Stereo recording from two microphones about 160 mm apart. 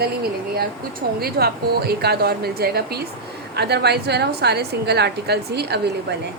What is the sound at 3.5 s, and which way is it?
A woman's voice, 90° right.